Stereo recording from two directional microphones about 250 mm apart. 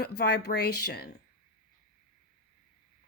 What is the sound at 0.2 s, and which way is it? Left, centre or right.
Speech, left.